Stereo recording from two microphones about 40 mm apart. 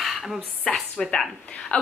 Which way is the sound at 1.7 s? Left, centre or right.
Left.